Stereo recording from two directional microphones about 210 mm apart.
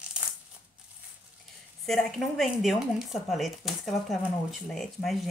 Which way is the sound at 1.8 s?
Centre (ahead or behind).